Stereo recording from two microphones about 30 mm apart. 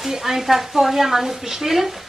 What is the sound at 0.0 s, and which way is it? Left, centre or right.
A woman's voice, centre.